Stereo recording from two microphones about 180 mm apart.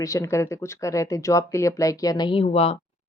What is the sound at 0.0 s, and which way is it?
Speech, 15° left (ahead or behind).